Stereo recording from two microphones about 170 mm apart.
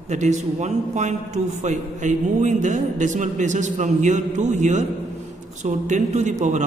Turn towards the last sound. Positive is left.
turn(degrees=-45)  # may be behind; listen again after turning